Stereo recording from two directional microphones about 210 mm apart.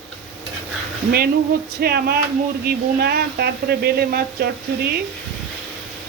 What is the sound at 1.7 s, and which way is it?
Speech, 50° right (ahead or behind).